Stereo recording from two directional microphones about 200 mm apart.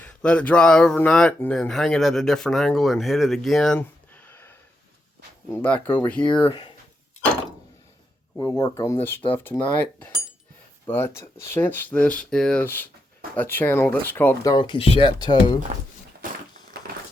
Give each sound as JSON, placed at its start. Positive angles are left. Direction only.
{"t": 0.0, "sound": "speech", "side_deg": 5}
{"t": 6.3, "sound": "speech", "side_deg": 25}
{"t": 8.4, "sound": "speech", "side_deg": 20}
{"t": 14.5, "sound": "speech", "side_deg": 25}